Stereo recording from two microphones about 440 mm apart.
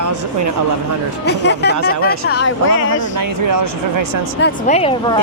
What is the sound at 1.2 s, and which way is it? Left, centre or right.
Speech, left.